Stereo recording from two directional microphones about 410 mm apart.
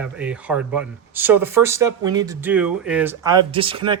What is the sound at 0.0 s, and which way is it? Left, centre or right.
Speech, centre.